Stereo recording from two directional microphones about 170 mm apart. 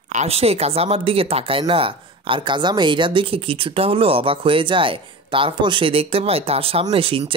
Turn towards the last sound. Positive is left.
turn(degrees=-30)  # may be behind; listen again after turning